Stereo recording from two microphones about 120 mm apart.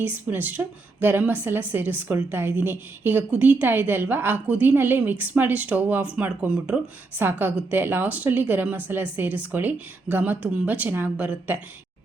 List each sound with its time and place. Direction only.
0.0 s a woman's voice: 15° right (ahead or behind)